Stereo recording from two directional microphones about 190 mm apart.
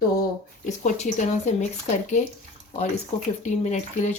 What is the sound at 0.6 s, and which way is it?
Speech, 40° left (ahead or behind).